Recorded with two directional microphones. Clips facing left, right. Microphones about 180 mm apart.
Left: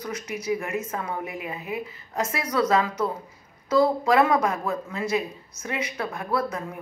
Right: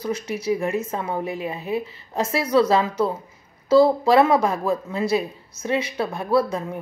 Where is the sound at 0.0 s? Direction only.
30° right (ahead or behind).